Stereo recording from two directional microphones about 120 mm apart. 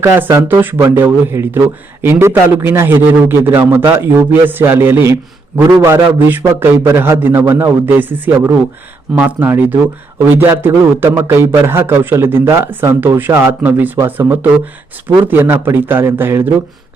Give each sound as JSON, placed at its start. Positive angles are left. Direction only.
{"t": 0.2, "sound": "a man's voice", "side_deg": -20}